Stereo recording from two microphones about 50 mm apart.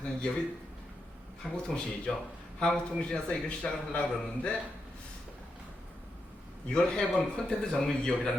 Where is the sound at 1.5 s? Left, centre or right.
Centre.